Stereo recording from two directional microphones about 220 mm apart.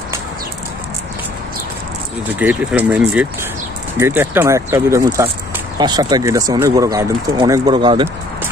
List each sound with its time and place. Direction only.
2.3 s speech: 5° right (ahead or behind); by 8.1 s 20° right (ahead or behind)